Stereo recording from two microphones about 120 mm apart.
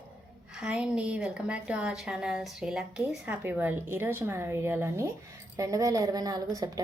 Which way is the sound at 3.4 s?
20° right (ahead or behind).